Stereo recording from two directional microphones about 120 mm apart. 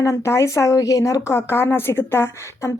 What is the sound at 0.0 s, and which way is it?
Speech, 25° left (ahead or behind).